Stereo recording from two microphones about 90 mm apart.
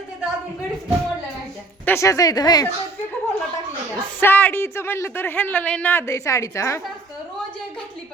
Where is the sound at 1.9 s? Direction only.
40° left (ahead or behind).